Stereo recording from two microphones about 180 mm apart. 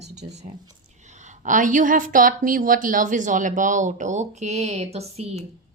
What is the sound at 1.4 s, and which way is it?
A woman's voice, 45° right (ahead or behind).